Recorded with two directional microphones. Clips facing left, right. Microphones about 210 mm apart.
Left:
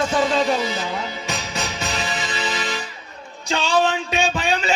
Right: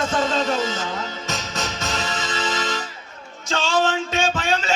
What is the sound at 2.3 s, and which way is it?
Music, 10° left (ahead or behind).